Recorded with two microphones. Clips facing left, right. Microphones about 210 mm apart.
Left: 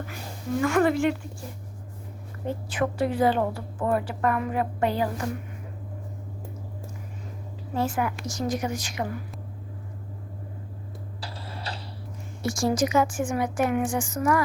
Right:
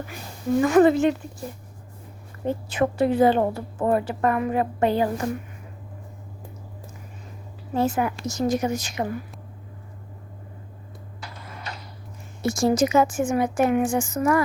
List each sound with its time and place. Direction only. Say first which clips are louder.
0.6 s a woman's voice: right 5 dB; 20° right (ahead or behind)
2.6 s a woman's voice: right 4 dB; 25° right (ahead or behind)
7.8 s a woman's voice: right 4 dB; 20° right (ahead or behind)
11.2 s a sound: left 1 dB; 30° left (ahead or behind)
12.4 s a woman's voice: right 4 dB; 25° right (ahead or behind)